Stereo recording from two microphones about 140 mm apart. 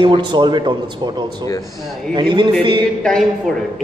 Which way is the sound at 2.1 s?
35° right (ahead or behind).